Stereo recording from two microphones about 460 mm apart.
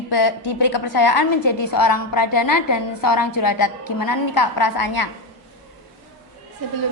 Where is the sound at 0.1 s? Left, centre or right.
Left.